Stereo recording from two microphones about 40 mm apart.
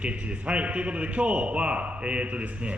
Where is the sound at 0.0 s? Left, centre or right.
Right.